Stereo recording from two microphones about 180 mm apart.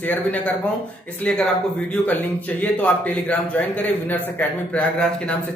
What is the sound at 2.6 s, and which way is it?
A man's voice, 10° left (ahead or behind).